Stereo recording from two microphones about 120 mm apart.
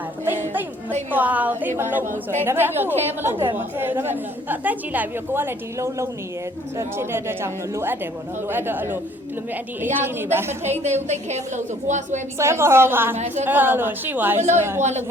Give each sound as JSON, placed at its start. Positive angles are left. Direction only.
{"t": 0.3, "sound": "a woman's voice", "side_deg": -15}
{"t": 10.6, "sound": "a woman's voice", "side_deg": -70}
{"t": 12.4, "sound": "a woman's voice", "side_deg": -20}
{"t": 13.1, "sound": "a woman's voice", "side_deg": -75}
{"t": 13.4, "sound": "a woman's voice", "side_deg": -15}
{"t": 14.8, "sound": "a woman's voice", "side_deg": -70}